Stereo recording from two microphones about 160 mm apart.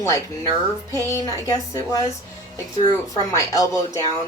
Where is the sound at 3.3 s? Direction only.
20° left (ahead or behind).